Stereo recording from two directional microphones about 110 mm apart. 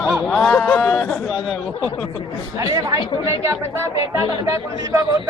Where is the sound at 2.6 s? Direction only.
30° right (ahead or behind).